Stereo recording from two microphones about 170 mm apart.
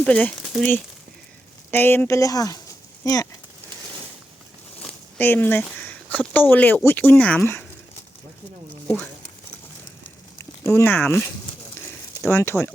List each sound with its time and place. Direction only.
0.0 s speech: 5° left (ahead or behind)
1.7 s speech: 10° left (ahead or behind)
4.8 s speech: 10° left (ahead or behind)
10.6 s speech: 15° left (ahead or behind)